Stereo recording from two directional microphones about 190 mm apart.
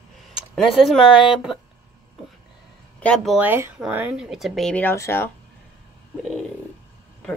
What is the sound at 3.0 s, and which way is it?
Speech, centre (ahead or behind).